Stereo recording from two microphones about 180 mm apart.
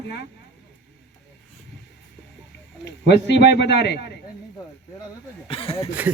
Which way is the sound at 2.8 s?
75° left (ahead or behind).